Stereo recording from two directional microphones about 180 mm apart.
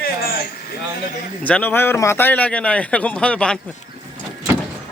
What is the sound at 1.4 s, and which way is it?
Speech, 10° left (ahead or behind).